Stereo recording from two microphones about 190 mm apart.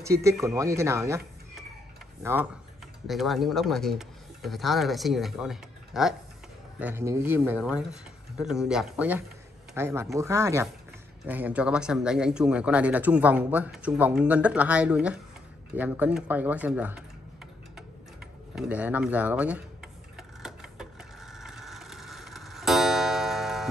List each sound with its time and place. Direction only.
0.0 s speech: 15° right (ahead or behind)
3.1 s speech: centre (ahead or behind)
6.8 s speech: 10° right (ahead or behind)
18.5 s speech: 5° right (ahead or behind)
20.2 s a sound: centre (ahead or behind)